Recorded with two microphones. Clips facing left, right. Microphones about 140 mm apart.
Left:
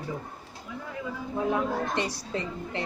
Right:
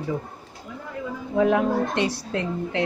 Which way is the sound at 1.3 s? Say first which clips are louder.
Right 8 dB; 80° right.